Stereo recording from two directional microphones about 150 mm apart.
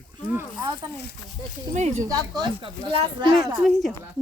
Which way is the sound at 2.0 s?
25° right (ahead or behind).